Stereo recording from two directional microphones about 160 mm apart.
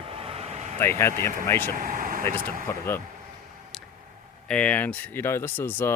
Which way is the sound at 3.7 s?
Centre (ahead or behind).